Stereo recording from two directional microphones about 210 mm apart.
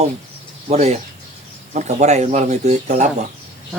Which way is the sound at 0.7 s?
30° right (ahead or behind).